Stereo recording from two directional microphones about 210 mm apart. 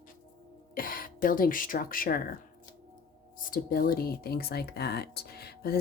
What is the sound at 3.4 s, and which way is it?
Speech, 40° left (ahead or behind).